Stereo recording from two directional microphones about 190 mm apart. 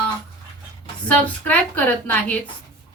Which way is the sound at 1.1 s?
5° left (ahead or behind).